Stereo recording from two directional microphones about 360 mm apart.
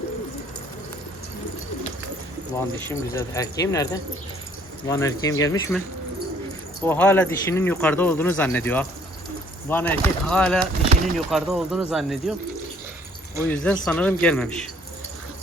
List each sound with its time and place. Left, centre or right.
2.9 s speech: centre
6.8 s speech: centre
13.5 s speech: centre